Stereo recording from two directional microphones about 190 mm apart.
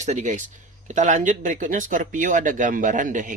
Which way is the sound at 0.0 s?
40° right (ahead or behind).